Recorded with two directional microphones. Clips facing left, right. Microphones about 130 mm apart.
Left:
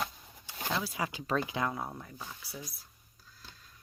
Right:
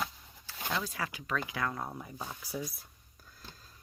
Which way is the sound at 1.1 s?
30° left (ahead or behind).